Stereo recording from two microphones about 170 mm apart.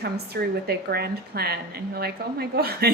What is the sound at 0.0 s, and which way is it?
A woman's voice, 70° right (ahead or behind).